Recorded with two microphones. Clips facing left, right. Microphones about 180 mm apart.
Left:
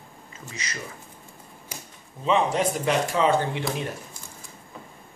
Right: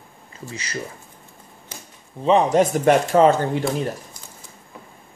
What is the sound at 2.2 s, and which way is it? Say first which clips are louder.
Speech: right 6 dB; 40° right (ahead or behind).